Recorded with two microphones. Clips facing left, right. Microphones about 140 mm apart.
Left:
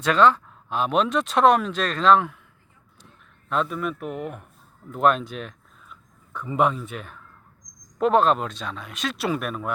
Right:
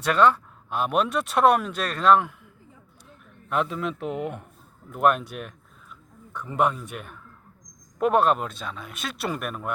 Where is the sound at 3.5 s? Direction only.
15° right (ahead or behind).